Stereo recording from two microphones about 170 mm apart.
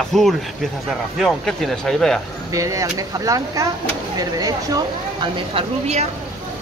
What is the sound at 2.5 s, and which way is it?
Speech, 20° right (ahead or behind).